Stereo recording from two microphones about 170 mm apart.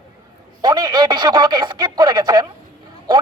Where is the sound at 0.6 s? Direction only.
25° right (ahead or behind).